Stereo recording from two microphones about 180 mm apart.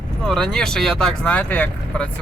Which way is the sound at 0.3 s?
5° left (ahead or behind).